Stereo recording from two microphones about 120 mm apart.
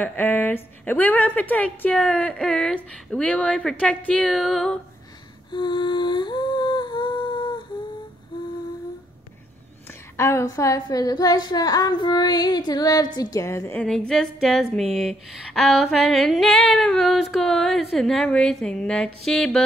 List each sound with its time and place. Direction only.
0.0 s a woman's voice: 15° left (ahead or behind)
4.3 s female singing: centre (ahead or behind)
5.5 s humming: 40° left (ahead or behind)
10.1 s a woman's voice: 25° left (ahead or behind)
13.7 s female singing: 5° left (ahead or behind)